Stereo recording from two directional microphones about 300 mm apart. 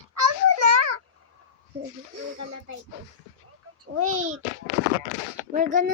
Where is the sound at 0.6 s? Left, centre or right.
Right.